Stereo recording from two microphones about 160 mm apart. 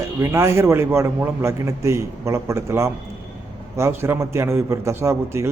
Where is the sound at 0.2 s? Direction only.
15° right (ahead or behind).